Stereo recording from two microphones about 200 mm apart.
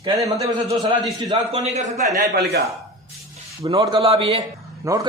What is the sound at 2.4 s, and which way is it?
Speech, 55° right (ahead or behind).